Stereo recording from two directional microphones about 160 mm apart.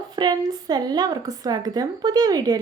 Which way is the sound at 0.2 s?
25° right (ahead or behind).